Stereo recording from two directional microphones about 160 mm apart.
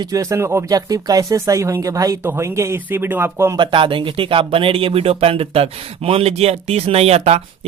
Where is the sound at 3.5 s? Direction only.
30° right (ahead or behind).